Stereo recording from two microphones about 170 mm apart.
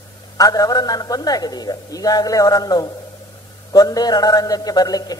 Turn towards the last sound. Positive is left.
turn(degrees=20)  # may be behind; listen again after turning